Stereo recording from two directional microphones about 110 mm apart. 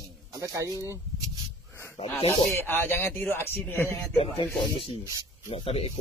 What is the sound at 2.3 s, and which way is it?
Speech, 20° left (ahead or behind).